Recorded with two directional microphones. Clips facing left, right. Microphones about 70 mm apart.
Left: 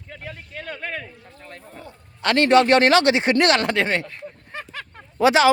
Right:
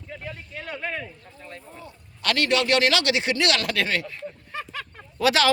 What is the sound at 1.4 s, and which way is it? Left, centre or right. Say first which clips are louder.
Speech: left 1 dB; left.